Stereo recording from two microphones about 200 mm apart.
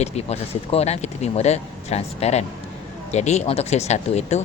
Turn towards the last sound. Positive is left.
turn(degrees=35)  # may be behind; listen again after turning